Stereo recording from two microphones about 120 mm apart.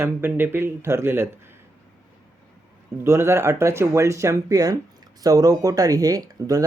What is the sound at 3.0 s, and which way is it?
Speech, 20° right (ahead or behind).